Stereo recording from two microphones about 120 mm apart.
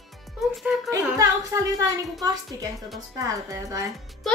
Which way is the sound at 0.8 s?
25° right (ahead or behind).